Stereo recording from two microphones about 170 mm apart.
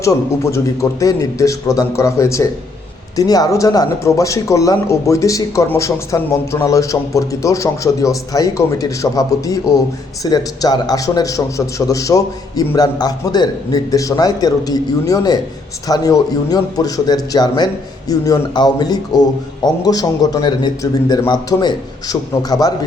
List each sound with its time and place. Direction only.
0.0 s speech: 20° left (ahead or behind)